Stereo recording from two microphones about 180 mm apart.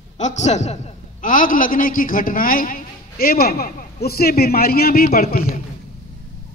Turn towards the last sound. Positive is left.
turn(degrees=55)  # may be behind; listen again after turning